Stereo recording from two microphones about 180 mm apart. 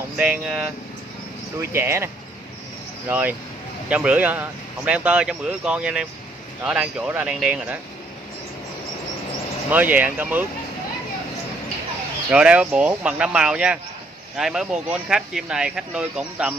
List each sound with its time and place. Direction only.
0.2 s speech: 5° right (ahead or behind)
3.1 s speech: 10° right (ahead or behind)
9.7 s speech: 10° right (ahead or behind)
12.3 s speech: 5° right (ahead or behind)